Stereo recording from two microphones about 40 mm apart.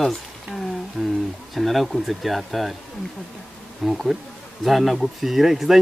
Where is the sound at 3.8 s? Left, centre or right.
Centre.